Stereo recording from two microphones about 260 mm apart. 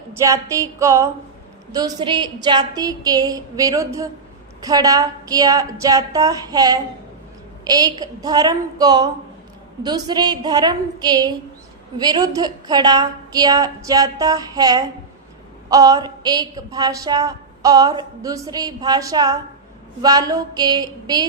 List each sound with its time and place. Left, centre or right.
0.1 s a woman's voice: centre